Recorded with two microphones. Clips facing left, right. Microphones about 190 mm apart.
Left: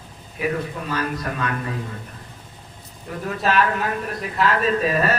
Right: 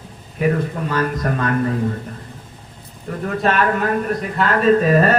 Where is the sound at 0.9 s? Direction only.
45° right (ahead or behind).